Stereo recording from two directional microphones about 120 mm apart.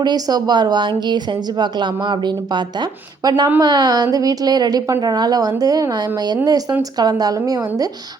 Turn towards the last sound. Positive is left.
turn(degrees=-30)  # may be behind; listen again after turning